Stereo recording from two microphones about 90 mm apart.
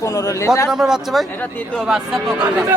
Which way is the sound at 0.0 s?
35° left (ahead or behind).